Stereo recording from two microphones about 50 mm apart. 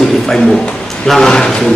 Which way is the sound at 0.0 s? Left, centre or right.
Centre.